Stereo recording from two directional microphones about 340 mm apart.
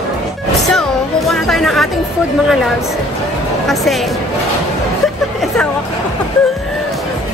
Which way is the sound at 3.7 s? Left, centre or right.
Centre.